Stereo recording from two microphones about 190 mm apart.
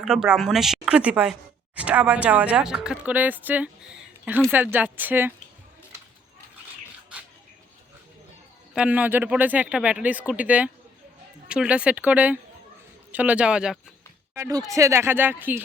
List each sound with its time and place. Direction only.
0.0 s speech: 5° right (ahead or behind)
8.7 s speech: 5° right (ahead or behind)
14.3 s speech: 15° right (ahead or behind)